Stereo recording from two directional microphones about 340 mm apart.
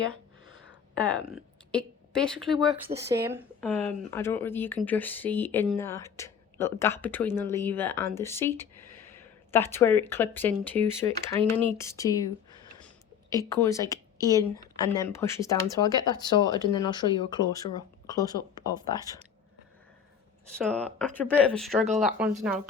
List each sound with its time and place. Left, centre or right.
0.7 s a woman's voice: centre
11.8 s a sound: centre
13.3 s speech: centre
20.6 s speech: centre